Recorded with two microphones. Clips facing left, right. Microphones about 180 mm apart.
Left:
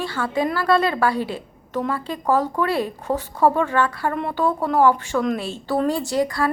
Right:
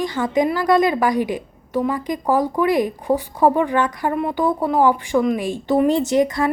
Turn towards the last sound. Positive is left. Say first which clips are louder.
# right 4 dB
turn(degrees=-20)  # may be behind; listen again after turning